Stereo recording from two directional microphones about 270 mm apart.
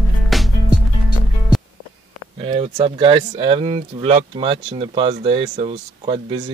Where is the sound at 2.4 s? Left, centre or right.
Centre.